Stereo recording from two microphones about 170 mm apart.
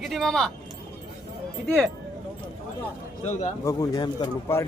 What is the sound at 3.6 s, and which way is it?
Speech, 20° left (ahead or behind).